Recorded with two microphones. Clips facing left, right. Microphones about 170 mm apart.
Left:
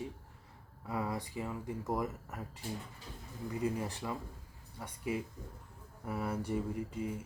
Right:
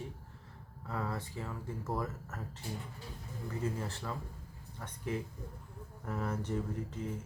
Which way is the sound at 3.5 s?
15° left (ahead or behind).